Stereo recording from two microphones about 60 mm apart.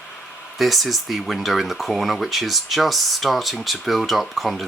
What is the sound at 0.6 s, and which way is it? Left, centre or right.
Speech, centre.